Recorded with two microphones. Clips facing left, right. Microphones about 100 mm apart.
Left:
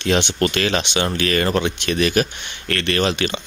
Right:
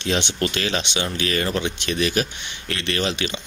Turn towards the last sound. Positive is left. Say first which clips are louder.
# left 5 dB
turn(degrees=55)  # may be behind; listen again after turning